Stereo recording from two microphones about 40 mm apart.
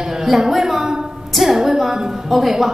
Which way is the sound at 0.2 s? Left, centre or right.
Centre.